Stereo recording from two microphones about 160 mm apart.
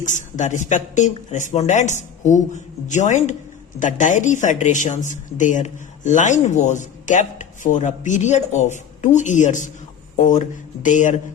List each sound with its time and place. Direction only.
0.0 s speech: 50° left (ahead or behind)